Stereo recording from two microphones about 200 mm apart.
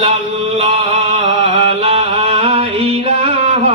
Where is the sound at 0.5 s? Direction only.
30° right (ahead or behind).